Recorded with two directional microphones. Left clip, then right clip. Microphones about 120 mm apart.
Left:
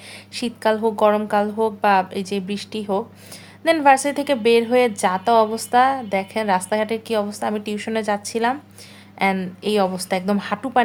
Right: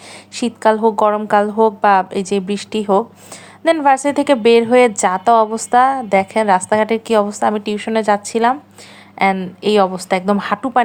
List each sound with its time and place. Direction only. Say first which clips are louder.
0.3 s a woman's voice: right 6 dB; 35° right (ahead or behind)
1.3 s a woman's voice: right 7 dB; 40° right (ahead or behind)
7.5 s a woman's voice: right 6 dB; 25° right (ahead or behind)